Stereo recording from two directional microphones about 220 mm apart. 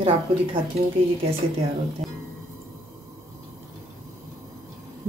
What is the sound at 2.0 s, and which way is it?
Music, centre (ahead or behind).